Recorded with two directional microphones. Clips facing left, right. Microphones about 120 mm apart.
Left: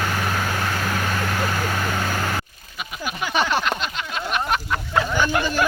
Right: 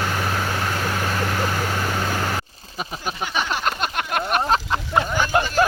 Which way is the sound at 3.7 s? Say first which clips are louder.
Right 2 dB; 50° right (ahead or behind).